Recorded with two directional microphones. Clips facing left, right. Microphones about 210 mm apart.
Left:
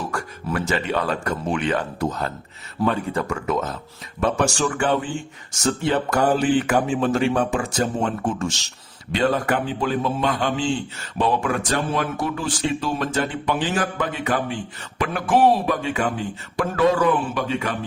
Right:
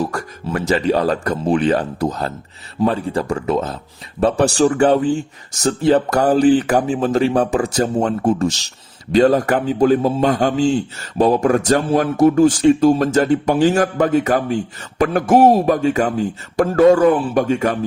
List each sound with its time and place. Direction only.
0.0 s speech: 40° right (ahead or behind)